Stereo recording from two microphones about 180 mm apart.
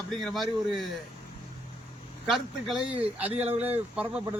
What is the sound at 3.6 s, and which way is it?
Speech, 10° right (ahead or behind).